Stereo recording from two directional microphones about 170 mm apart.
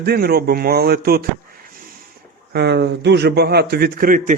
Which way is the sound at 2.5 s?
75° right (ahead or behind).